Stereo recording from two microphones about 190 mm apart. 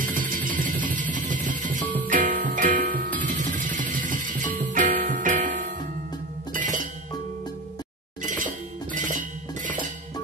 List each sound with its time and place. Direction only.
0.0 s music: 45° right (ahead or behind)
8.2 s chink: 45° right (ahead or behind)